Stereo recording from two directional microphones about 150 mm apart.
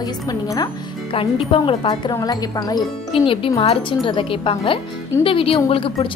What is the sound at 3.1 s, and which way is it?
A woman's voice, 35° left (ahead or behind).